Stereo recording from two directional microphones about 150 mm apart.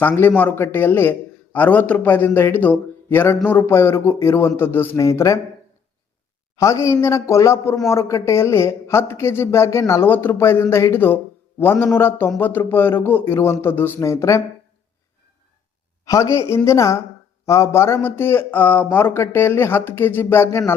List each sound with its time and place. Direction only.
0.0 s speech: 10° left (ahead or behind)
6.6 s a man's voice: 20° left (ahead or behind)
16.0 s a man's voice: 20° left (ahead or behind)